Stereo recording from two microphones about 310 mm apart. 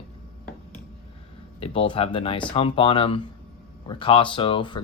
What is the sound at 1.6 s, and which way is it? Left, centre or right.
Speech, centre.